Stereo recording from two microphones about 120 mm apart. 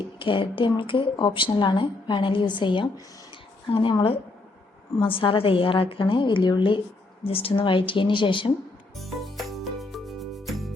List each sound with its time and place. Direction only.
0.0 s speech: 45° left (ahead or behind)
9.0 s music: centre (ahead or behind)